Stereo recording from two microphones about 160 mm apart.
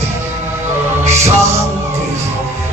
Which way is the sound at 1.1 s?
15° right (ahead or behind).